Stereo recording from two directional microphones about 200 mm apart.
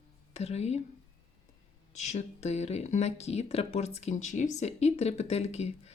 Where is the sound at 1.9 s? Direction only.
35° left (ahead or behind).